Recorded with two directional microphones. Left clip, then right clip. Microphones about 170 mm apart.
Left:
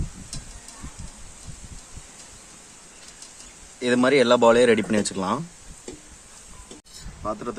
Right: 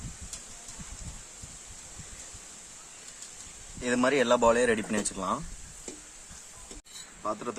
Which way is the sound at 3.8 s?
30° left (ahead or behind).